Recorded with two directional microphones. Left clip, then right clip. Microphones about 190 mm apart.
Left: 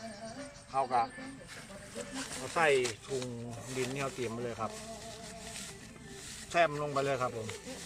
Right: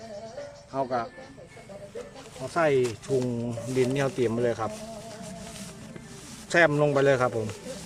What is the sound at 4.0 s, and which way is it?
Speech, 50° right (ahead or behind).